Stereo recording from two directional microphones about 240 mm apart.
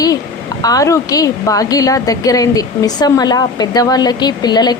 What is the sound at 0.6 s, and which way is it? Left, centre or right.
A woman's voice, centre.